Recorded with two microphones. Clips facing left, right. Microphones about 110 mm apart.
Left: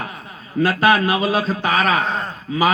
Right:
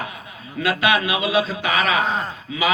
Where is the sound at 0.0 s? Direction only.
40° left (ahead or behind).